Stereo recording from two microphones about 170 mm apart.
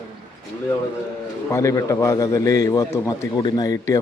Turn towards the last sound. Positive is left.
turn(degrees=20)  # may be behind; listen again after turning